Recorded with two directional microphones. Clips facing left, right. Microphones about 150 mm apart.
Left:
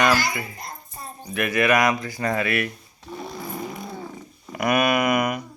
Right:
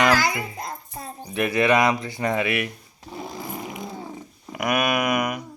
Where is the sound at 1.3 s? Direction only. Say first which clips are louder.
Right 1 dB; 25° right (ahead or behind).